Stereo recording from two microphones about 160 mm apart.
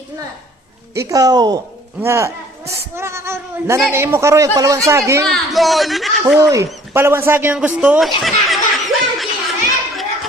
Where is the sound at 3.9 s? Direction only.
15° right (ahead or behind).